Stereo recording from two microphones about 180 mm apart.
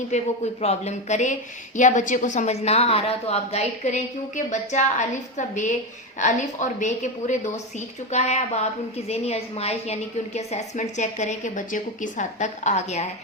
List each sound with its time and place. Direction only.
0.1 s a woman's voice: 40° left (ahead or behind)